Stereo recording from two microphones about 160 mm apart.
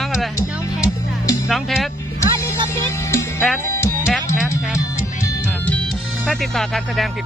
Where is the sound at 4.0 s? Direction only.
5° right (ahead or behind).